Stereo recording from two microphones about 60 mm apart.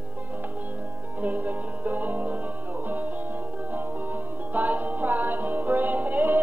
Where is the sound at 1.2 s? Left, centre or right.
Right.